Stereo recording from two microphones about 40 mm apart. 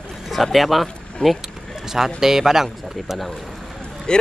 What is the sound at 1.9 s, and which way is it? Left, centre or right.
Speech, centre.